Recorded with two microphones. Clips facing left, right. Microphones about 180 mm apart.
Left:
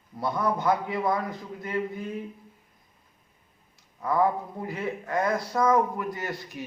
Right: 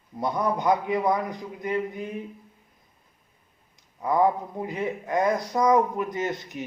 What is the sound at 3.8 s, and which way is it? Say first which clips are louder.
Speech: right 2 dB; 20° right (ahead or behind).